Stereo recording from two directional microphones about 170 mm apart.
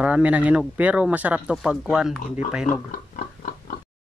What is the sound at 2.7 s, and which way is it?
Pig, 55° left (ahead or behind).